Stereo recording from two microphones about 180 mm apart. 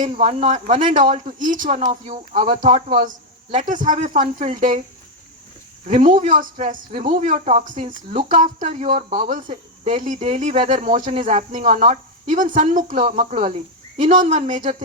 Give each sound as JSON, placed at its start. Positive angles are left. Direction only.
{"t": 0.0, "sound": "speech", "side_deg": -40}
{"t": 5.9, "sound": "speech", "side_deg": -45}